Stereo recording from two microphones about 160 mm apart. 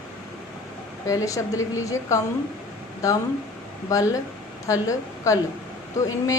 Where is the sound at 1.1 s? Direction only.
20° left (ahead or behind).